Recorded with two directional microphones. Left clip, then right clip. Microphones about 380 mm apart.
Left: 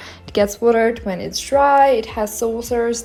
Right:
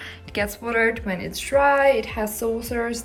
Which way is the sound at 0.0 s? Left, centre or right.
Centre.